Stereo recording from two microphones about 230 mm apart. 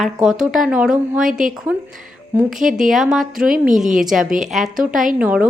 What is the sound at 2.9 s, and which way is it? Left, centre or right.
A woman's voice, centre.